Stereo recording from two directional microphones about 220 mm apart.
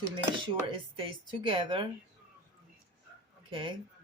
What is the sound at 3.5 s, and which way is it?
Speech, 20° right (ahead or behind).